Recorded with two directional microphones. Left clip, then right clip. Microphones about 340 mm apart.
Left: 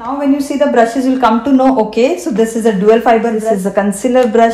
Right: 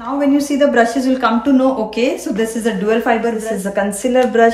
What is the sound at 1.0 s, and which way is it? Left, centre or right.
A woman's voice, centre.